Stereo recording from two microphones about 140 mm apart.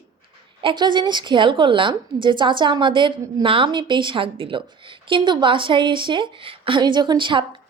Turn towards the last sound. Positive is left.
turn(degrees=-35)  # may be behind; listen again after turning